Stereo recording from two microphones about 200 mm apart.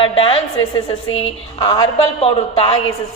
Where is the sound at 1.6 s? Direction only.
20° left (ahead or behind).